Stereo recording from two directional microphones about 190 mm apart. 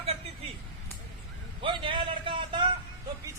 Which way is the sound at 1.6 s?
25° right (ahead or behind).